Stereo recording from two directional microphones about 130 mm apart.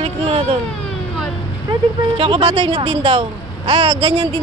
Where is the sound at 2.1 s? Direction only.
45° right (ahead or behind).